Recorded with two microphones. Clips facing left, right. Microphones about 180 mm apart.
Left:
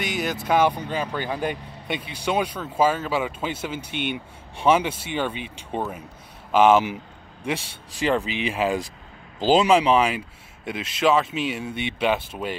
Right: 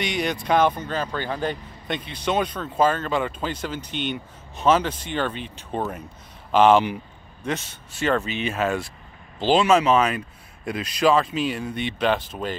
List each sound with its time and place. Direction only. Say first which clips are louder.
0.0 s speech: right 1 dB; 5° left (ahead or behind)
8.3 s speech: even; 90° left
8.5 s speech: left 1 dB; 15° left (ahead or behind)
11.2 s speech: right 2 dB; 65° left (ahead or behind)
11.5 s speech: right 1 dB; 5° left (ahead or behind)